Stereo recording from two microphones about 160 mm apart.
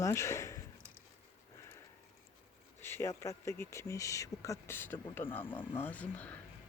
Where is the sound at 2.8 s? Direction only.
15° left (ahead or behind).